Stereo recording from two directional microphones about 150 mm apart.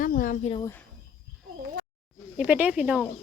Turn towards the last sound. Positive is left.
turn(degrees=-5)  # may be behind; listen again after turning